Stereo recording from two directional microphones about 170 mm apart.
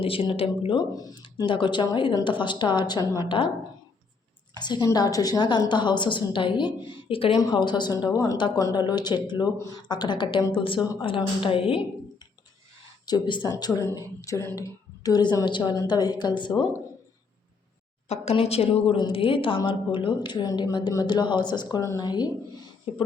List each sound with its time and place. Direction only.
0.0 s a woman's voice: 35° left (ahead or behind)
4.6 s a woman's voice: 25° left (ahead or behind)
13.1 s a woman's voice: 25° left (ahead or behind)
18.1 s a woman's voice: 40° left (ahead or behind)